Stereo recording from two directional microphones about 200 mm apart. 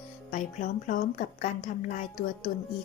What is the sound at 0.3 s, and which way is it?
A woman's voice, 40° left (ahead or behind).